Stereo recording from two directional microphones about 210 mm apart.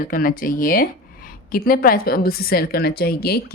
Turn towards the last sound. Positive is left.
turn(degrees=45)  # may be behind; listen again after turning